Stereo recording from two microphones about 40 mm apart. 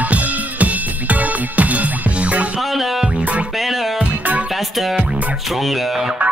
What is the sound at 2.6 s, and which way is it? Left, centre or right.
Music, centre.